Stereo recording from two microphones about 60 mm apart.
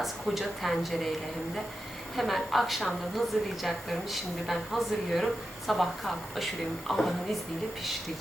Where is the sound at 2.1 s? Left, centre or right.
Centre.